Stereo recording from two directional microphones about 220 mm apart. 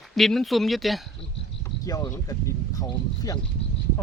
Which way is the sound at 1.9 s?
15° left (ahead or behind).